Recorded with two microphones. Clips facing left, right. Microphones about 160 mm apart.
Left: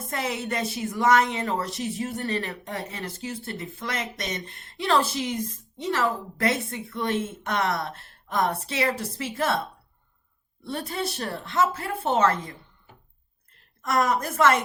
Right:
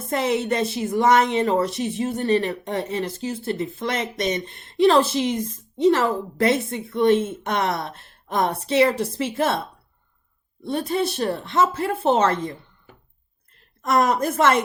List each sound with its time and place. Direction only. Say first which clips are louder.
0.1 s speech: right 8 dB; 25° right (ahead or behind)
10.6 s speech: right 7 dB; 20° right (ahead or behind)
13.8 s speech: right 4 dB; 25° right (ahead or behind)